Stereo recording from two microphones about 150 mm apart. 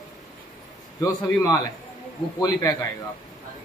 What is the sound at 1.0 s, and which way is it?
A man's voice, 25° left (ahead or behind).